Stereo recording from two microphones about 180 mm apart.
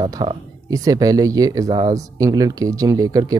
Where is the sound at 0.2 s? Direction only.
30° right (ahead or behind).